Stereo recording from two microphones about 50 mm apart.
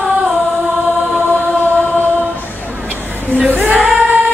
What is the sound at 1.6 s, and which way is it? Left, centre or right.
Choir, left.